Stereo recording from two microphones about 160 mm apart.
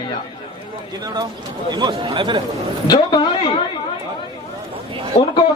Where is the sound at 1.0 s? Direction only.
25° right (ahead or behind).